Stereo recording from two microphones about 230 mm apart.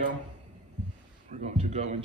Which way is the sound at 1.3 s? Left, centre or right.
Right.